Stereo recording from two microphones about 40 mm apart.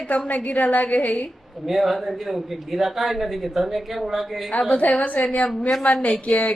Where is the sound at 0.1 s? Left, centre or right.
Left.